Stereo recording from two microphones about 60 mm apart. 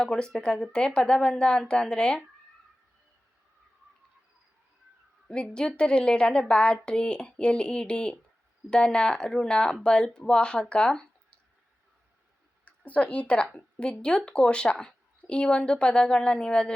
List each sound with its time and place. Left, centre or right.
0.0 s a woman's voice: centre
5.3 s a woman's voice: centre
12.6 s a woman's voice: left